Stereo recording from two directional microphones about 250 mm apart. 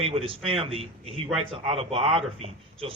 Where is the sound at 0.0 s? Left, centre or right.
Right.